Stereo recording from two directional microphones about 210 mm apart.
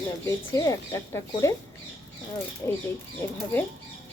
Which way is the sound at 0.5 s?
15° left (ahead or behind).